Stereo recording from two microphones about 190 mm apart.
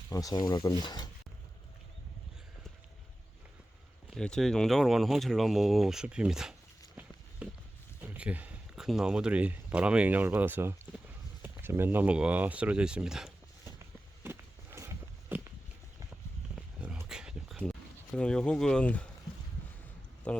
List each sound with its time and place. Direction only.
0.1 s speech: 20° left (ahead or behind)
4.1 s speech: centre (ahead or behind)
14.3 s walk: 15° right (ahead or behind)
16.6 s dog: 5° right (ahead or behind)
20.2 s speech: 5° left (ahead or behind)